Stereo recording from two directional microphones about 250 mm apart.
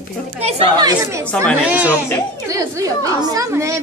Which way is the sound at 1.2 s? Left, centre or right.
Centre.